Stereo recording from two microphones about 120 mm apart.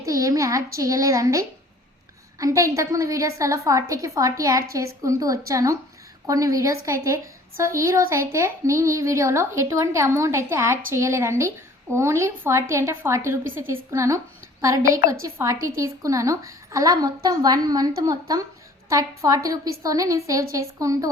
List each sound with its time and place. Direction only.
0.0 s a woman's voice: 25° right (ahead or behind)